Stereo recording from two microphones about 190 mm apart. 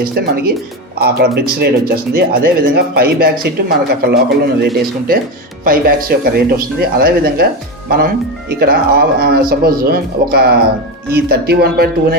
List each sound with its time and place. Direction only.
0.0 s speech: 55° right (ahead or behind)